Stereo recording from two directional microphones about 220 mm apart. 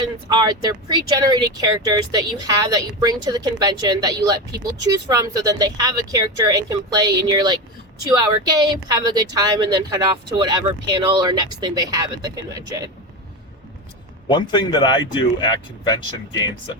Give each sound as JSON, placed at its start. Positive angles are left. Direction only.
{"t": 0.0, "sound": "speech", "side_deg": -20}
{"t": 14.3, "sound": "speech", "side_deg": 20}